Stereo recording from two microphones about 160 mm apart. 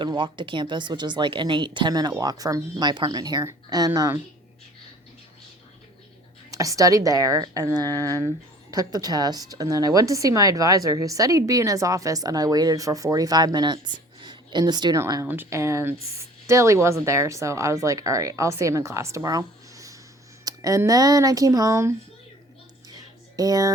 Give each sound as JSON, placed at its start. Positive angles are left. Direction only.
{"t": 0.0, "sound": "a woman's voice", "side_deg": -30}
{"t": 6.5, "sound": "a woman's voice", "side_deg": -20}
{"t": 7.9, "sound": "speech", "side_deg": 15}
{"t": 8.7, "sound": "a woman's voice", "side_deg": -25}
{"t": 22.9, "sound": "music", "side_deg": -25}